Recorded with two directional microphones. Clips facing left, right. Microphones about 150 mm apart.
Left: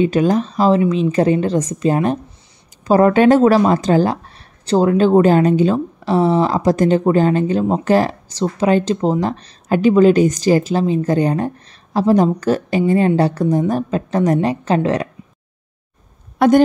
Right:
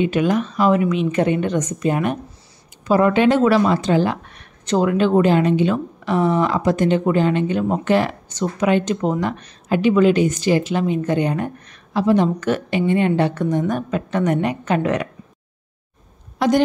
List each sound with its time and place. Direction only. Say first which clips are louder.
0.0 s speech: left 3 dB; 35° left (ahead or behind)
16.3 s speech: left 5 dB; 55° left (ahead or behind)